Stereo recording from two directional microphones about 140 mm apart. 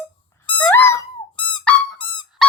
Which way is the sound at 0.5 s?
15° left (ahead or behind).